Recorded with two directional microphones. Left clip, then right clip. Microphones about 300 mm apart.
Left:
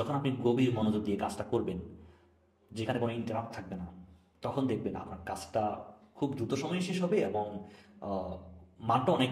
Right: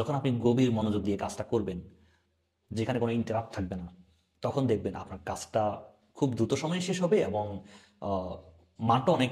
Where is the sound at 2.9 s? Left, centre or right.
Right.